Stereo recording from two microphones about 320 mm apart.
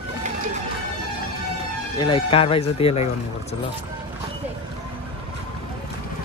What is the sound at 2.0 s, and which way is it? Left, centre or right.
A man's voice, centre.